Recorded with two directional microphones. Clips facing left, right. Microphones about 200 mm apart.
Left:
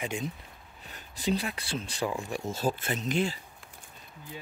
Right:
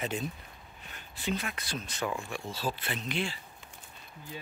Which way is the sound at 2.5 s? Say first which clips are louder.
Left 6 dB; 45° left (ahead or behind).